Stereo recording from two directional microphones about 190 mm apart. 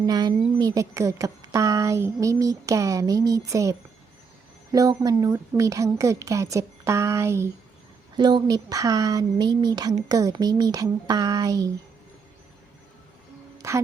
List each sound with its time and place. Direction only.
0.0 s a woman's voice: 20° right (ahead or behind)
13.6 s speech: 15° right (ahead or behind)